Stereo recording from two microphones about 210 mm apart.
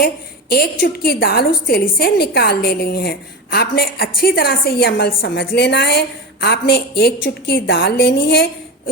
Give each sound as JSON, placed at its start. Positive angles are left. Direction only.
{"t": 0.5, "sound": "a woman's voice", "side_deg": 45}